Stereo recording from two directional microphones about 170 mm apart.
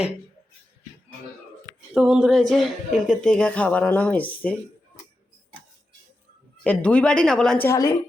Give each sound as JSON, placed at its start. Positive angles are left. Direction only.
{"t": 1.9, "sound": "speech", "side_deg": -5}
{"t": 6.7, "sound": "speech", "side_deg": 5}
{"t": 7.7, "sound": "a woman's voice", "side_deg": 20}